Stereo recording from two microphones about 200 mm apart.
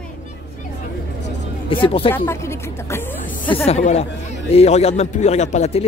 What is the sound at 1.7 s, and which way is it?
Speech, 25° left (ahead or behind).